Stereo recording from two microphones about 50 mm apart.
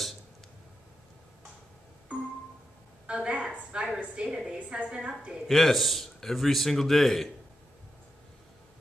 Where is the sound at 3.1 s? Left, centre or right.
Centre.